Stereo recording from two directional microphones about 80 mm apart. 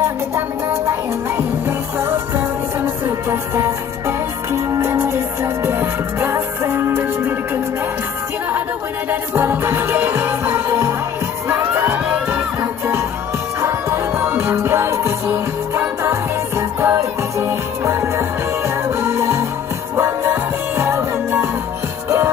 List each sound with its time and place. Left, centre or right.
2.0 s music: right
9.1 s music: right
13.6 s music: right